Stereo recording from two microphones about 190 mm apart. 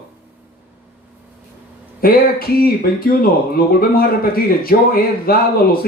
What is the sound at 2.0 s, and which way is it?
Speech, 50° left (ahead or behind).